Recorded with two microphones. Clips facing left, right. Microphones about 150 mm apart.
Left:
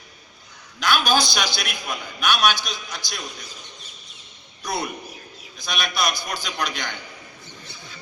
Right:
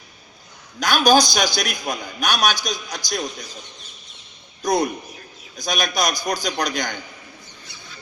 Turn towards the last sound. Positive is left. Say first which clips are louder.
# right 4 dB
turn(degrees=-40)  # may be behind; listen again after turning